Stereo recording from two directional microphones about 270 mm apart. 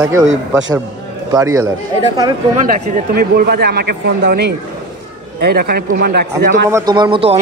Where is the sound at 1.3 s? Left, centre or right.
Centre.